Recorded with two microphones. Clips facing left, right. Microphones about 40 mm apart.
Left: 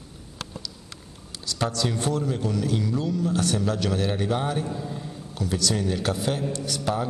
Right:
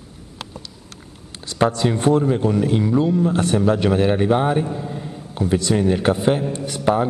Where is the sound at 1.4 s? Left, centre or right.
Right.